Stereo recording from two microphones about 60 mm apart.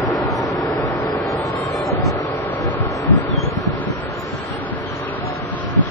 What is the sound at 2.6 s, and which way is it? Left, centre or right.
Vehicle, left.